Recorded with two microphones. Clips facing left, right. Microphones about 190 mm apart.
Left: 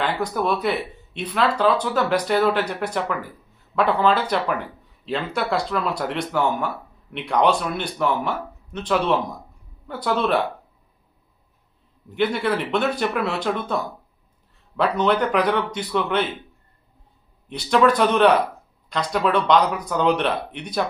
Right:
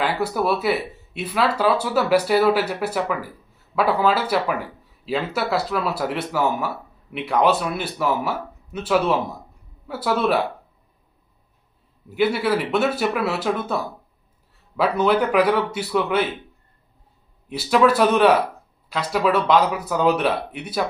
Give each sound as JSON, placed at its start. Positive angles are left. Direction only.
{"t": 0.0, "sound": "speech", "side_deg": -5}
{"t": 12.0, "sound": "speech", "side_deg": -5}
{"t": 17.5, "sound": "speech", "side_deg": -5}